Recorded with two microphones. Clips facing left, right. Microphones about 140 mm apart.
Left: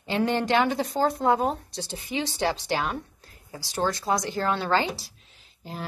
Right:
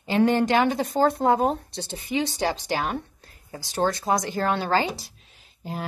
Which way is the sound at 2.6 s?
40° right (ahead or behind).